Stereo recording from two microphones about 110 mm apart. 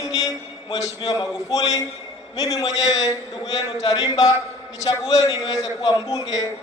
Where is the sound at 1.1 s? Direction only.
35° left (ahead or behind).